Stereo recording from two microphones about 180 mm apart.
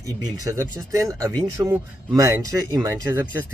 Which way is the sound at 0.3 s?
15° right (ahead or behind).